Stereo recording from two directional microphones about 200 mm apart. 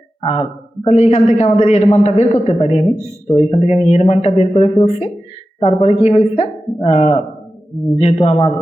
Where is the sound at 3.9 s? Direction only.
30° left (ahead or behind).